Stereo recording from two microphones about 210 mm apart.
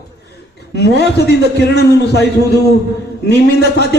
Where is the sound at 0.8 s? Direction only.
50° left (ahead or behind).